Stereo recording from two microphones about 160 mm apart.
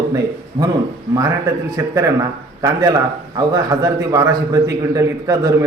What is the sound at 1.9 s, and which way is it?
A man's voice, 20° right (ahead or behind).